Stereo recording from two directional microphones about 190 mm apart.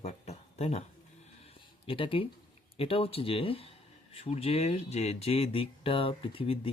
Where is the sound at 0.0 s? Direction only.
35° left (ahead or behind).